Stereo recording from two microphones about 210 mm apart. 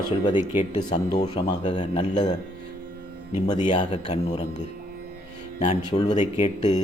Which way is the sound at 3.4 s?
20° left (ahead or behind).